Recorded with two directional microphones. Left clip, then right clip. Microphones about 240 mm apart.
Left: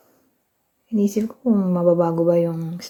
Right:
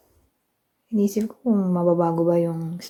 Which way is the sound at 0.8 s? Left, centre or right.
Centre.